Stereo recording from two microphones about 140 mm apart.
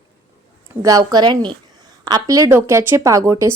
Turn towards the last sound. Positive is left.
turn(degrees=-20)  # may be behind; listen again after turning